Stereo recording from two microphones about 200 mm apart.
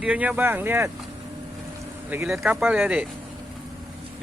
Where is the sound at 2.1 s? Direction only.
10° right (ahead or behind).